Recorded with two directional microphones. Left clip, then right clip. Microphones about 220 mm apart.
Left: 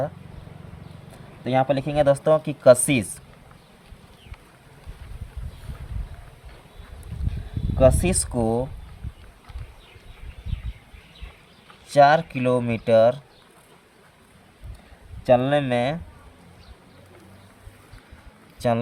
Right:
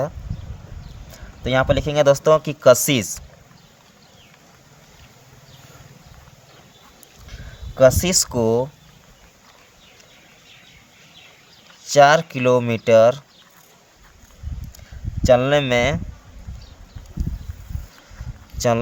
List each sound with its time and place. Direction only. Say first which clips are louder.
1.5 s speech: right 3 dB; 40° right (ahead or behind)
7.9 s speech: right 3 dB; 35° right (ahead or behind)
11.9 s speech: right 3 dB; 30° right (ahead or behind)
15.3 s speech: right 4 dB; 35° right (ahead or behind)